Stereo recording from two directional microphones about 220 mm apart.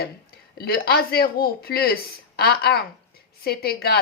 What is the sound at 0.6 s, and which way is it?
A woman's voice, 45° left (ahead or behind).